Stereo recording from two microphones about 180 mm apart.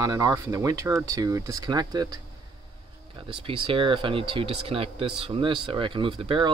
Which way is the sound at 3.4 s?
30° right (ahead or behind).